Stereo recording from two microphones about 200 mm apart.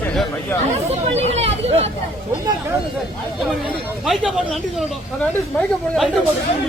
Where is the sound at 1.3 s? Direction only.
30° right (ahead or behind).